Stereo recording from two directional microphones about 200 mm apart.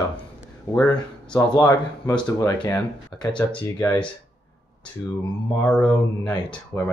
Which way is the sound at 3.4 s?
5° left (ahead or behind).